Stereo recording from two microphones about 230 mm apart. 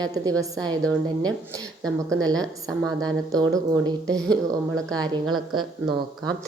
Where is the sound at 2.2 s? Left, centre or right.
Centre.